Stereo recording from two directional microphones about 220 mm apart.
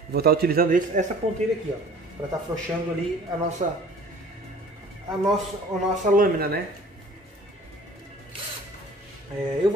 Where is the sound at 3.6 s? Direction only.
35° right (ahead or behind).